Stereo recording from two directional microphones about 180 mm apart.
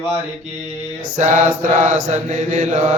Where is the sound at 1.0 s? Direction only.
45° right (ahead or behind).